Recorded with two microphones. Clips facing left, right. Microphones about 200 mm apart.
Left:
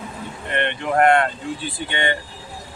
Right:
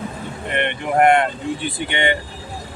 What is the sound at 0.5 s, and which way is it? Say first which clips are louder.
Speech: right 1 dB; 15° right (ahead or behind).